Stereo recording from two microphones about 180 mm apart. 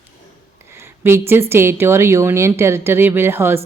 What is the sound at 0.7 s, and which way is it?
A woman's voice, 15° right (ahead or behind).